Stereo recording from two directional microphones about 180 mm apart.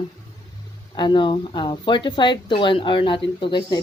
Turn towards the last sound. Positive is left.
turn(degrees=25)  # may be behind; listen again after turning